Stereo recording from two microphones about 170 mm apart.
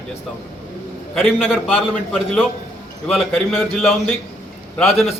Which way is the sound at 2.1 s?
Centre (ahead or behind).